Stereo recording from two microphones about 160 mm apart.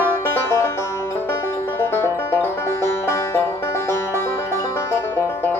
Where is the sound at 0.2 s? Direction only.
15° left (ahead or behind).